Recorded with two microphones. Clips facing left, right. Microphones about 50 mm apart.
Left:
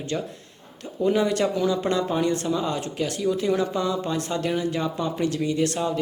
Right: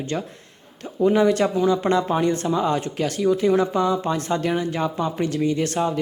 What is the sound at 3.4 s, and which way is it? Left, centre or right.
Speech, right.